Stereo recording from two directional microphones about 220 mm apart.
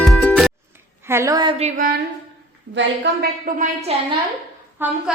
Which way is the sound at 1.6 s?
40° right (ahead or behind).